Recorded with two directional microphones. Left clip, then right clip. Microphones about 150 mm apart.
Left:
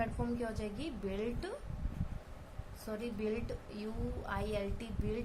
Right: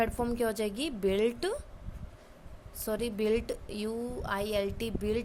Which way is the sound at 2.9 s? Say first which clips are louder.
Right 9 dB; 80° right.